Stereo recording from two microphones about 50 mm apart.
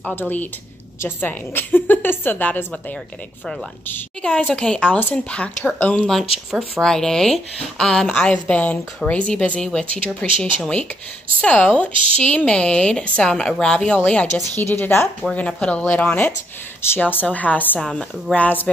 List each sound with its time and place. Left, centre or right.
0.1 s a woman's voice: left
4.2 s speech: left
6.0 s speech: centre
8.3 s speech: left
14.0 s speech: left
14.6 s speech: left
15.3 s a woman's voice: left
17.7 s speech: centre
18.3 s a woman's voice: left